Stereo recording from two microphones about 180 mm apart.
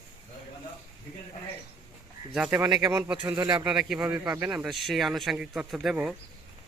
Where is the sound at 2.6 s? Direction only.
20° right (ahead or behind); by 6.1 s 5° right (ahead or behind).